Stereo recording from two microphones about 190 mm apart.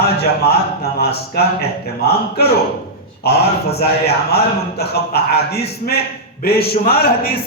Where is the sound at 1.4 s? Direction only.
55° left (ahead or behind).